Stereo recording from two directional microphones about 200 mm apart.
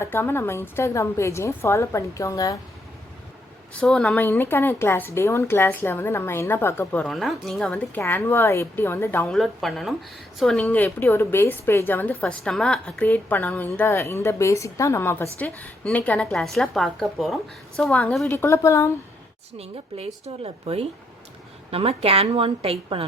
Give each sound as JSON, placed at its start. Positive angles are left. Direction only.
{"t": 0.0, "sound": "a woman's voice", "side_deg": 10}
{"t": 3.8, "sound": "a woman's voice", "side_deg": 5}
{"t": 19.5, "sound": "a woman's voice", "side_deg": -30}